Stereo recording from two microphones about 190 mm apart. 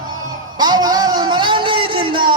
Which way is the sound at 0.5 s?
20° right (ahead or behind).